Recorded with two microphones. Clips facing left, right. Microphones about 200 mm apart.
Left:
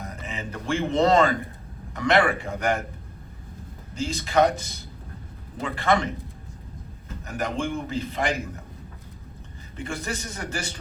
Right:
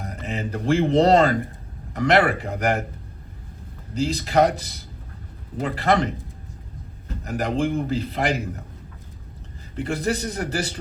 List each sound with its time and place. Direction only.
0.3 s speech: 35° right (ahead or behind)
3.9 s speech: 35° right (ahead or behind)
7.3 s speech: 35° right (ahead or behind)
9.7 s speech: 35° right (ahead or behind)